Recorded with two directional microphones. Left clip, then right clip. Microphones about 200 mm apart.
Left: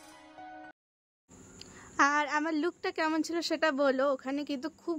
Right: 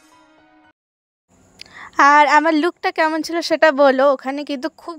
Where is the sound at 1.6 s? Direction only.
40° right (ahead or behind).